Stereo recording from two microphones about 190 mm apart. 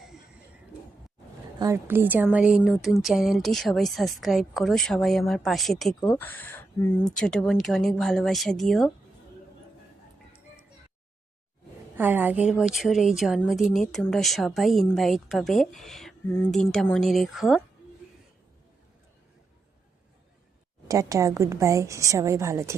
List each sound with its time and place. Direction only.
1.5 s a woman's voice: 15° right (ahead or behind); by 5.9 s centre (ahead or behind)
6.0 s a woman's voice: 15° left (ahead or behind)
11.9 s a woman's voice: 10° right (ahead or behind)
20.8 s a woman's voice: 15° right (ahead or behind)